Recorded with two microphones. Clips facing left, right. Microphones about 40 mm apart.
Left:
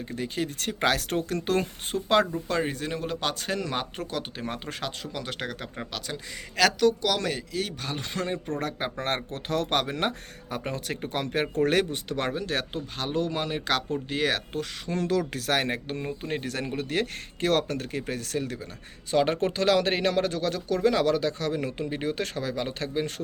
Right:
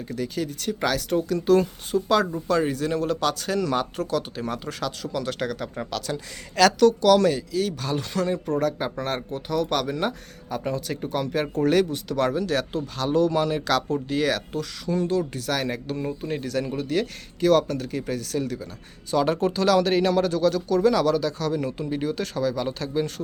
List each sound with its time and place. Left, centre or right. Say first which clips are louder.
0.0 s speech: right 2 dB; left
0.6 s speech: even; left
5.1 s speech: right 6 dB; centre
14.9 s speech: right 2 dB; left
15.4 s speech: even; left